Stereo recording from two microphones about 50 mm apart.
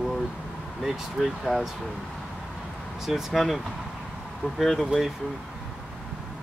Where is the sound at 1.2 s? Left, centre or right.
Centre.